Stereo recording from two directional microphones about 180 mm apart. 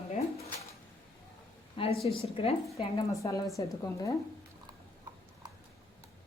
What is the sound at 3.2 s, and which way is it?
Speech, 15° left (ahead or behind).